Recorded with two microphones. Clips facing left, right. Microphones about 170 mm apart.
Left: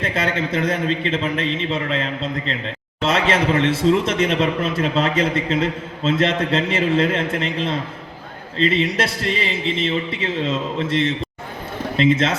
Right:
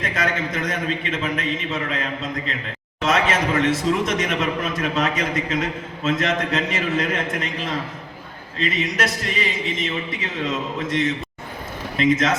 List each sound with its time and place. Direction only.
0.0 s a man's voice: 30° left (ahead or behind)